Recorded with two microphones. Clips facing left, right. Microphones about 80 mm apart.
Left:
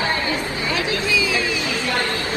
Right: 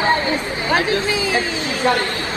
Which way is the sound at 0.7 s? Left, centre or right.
Right.